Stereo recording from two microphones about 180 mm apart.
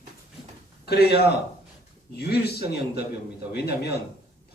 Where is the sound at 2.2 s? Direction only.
65° left (ahead or behind).